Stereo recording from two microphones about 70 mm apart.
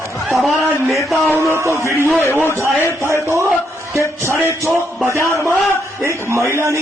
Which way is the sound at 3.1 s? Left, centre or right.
Right.